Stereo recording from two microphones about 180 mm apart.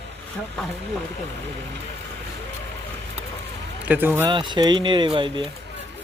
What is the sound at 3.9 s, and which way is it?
Speech, 10° right (ahead or behind).